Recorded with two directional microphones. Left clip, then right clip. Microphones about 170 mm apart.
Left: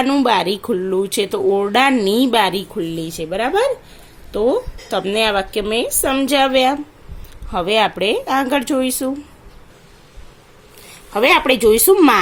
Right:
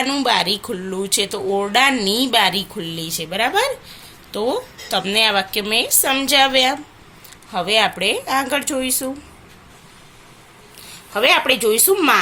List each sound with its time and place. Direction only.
0.0 s speech: 50° left (ahead or behind)
11.1 s speech: 50° left (ahead or behind)